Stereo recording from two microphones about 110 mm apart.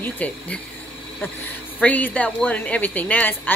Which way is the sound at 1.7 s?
15° left (ahead or behind).